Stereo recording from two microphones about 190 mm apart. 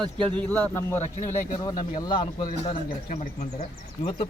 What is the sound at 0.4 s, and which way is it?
Speech, 10° left (ahead or behind).